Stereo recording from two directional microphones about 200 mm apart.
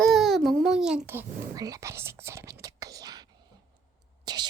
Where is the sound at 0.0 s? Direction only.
Centre (ahead or behind); by 3.2 s 20° right (ahead or behind).